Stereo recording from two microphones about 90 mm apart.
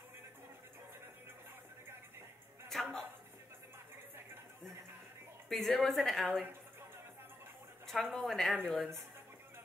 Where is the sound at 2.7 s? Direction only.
Centre (ahead or behind).